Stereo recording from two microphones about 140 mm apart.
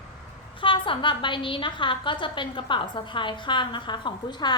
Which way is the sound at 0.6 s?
35° left (ahead or behind).